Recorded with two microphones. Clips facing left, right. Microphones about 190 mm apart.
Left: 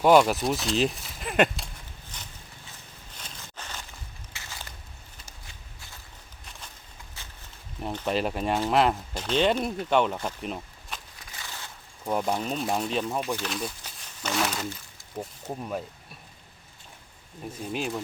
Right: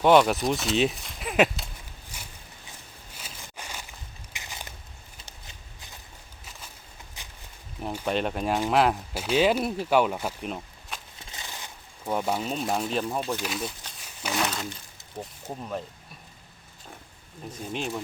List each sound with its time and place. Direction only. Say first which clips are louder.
0.0 s speech: even; 5° left (ahead or behind)
2.1 s a sound: even; 10° right (ahead or behind)
3.2 s walk: right 1 dB; 10° right (ahead or behind)
4.3 s biting: right 2 dB; 15° right (ahead or behind)
7.2 s a sound: right 1 dB; 15° right (ahead or behind)
7.8 s speech: even; centre (ahead or behind)
11.2 s walk: right 1 dB; 20° right (ahead or behind)
12.0 s speech: even; 5° right (ahead or behind)
17.7 s speech: left 1 dB; 5° left (ahead or behind)